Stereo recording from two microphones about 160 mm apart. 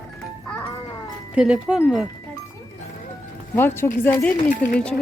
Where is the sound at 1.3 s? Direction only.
5° right (ahead or behind).